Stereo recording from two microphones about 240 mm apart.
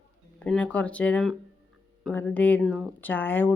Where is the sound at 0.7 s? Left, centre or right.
Centre.